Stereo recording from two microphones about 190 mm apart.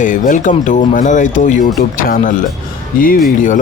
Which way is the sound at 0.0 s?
45° left (ahead or behind).